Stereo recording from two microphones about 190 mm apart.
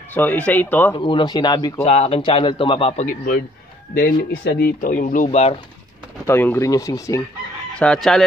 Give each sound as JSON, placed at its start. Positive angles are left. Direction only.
{"t": 0.1, "sound": "speech", "side_deg": 10}
{"t": 0.9, "sound": "a man's voice", "side_deg": 25}
{"t": 1.8, "sound": "a man's voice", "side_deg": 35}
{"t": 3.9, "sound": "speech", "side_deg": 55}
{"t": 6.2, "sound": "speech", "side_deg": 10}
{"t": 7.8, "sound": "chicken", "side_deg": 5}